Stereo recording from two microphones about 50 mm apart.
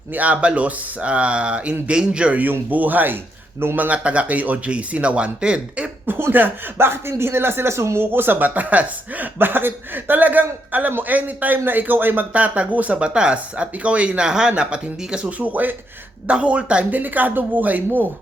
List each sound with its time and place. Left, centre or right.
0.1 s speech: right
2.4 s speech: right
6.1 s speech: right
8.1 s speech: right
12.3 s speech: right
15.3 s speech: right
17.0 s speech: right